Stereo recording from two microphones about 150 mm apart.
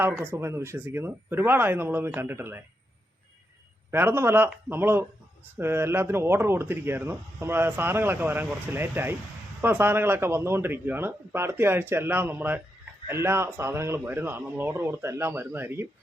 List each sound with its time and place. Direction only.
0.0 s speech: 15° right (ahead or behind)
3.9 s speech: 15° right (ahead or behind)